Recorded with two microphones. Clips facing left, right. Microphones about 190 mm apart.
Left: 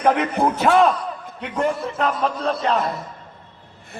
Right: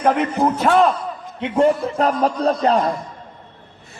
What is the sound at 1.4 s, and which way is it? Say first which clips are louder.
A man's voice: right 7 dB; 30° right (ahead or behind).